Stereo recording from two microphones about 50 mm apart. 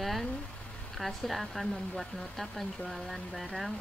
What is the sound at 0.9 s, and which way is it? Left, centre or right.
Speech, centre.